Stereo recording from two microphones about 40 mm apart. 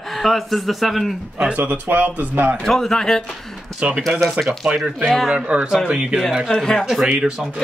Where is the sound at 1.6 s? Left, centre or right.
Right.